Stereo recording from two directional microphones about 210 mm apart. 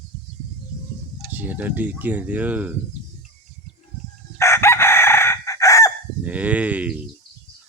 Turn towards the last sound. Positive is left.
turn(degrees=-5)  # may be behind; listen again after turning